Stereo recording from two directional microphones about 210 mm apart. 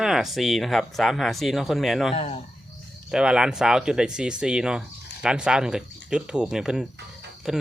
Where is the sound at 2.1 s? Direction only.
25° left (ahead or behind).